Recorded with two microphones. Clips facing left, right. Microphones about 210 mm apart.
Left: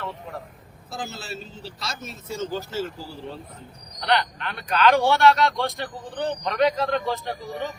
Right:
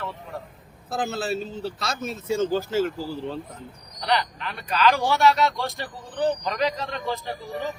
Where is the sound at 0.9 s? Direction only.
55° right (ahead or behind).